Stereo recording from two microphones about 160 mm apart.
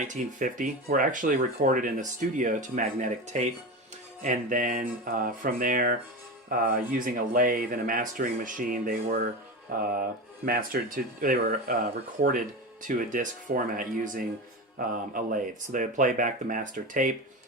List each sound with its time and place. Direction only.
0.0 s speech: 50° right (ahead or behind)
4.2 s speech: 55° right (ahead or behind)
13.0 s speech: 55° right (ahead or behind)